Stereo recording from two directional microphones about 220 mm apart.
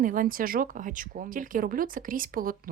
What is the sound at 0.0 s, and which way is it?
Speech, 40° right (ahead or behind).